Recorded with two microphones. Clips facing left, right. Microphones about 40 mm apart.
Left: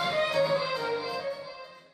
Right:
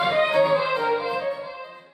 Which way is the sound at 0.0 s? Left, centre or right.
Right.